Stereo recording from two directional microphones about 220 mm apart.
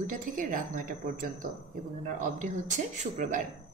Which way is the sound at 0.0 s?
35° right (ahead or behind).